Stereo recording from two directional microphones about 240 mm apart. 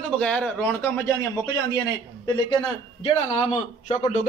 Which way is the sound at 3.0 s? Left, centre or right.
Left.